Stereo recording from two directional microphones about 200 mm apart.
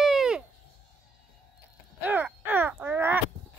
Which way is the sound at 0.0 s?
Centre (ahead or behind).